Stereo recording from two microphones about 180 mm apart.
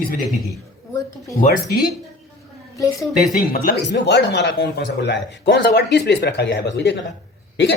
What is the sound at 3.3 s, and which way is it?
Speech, 50° left (ahead or behind).